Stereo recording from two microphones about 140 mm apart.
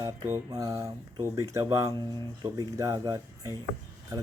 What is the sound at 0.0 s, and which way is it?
Speech, 25° right (ahead or behind).